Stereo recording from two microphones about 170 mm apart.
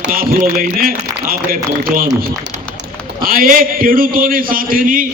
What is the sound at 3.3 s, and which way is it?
A man's voice, 55° right (ahead or behind).